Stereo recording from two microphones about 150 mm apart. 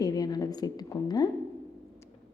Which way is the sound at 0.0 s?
25° left (ahead or behind).